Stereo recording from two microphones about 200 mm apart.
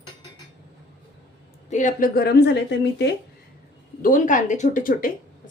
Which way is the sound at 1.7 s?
40° left (ahead or behind).